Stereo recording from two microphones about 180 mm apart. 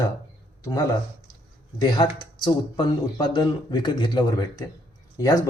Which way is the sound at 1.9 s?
25° left (ahead or behind).